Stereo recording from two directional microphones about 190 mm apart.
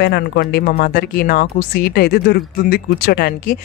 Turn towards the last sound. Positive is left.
turn(degrees=50)  # may be behind; listen again after turning